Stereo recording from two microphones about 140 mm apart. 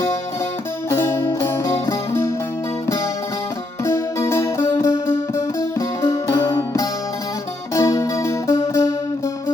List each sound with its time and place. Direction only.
0.9 s music: 20° left (ahead or behind)
3.8 s music: 20° left (ahead or behind)